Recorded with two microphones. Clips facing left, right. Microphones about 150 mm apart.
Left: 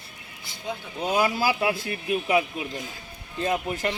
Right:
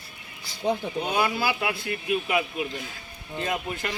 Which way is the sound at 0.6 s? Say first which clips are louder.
Right 8 dB; 40° right (ahead or behind).